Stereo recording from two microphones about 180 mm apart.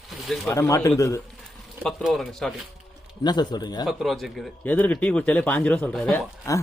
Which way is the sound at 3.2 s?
25° left (ahead or behind).